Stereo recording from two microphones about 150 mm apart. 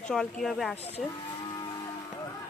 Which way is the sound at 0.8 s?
40° left (ahead or behind).